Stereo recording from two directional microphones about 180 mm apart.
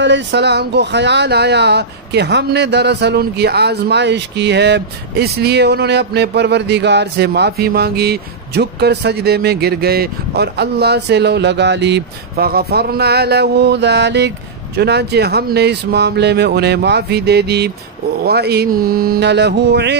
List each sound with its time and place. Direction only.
0.0 s speech: 75° right (ahead or behind)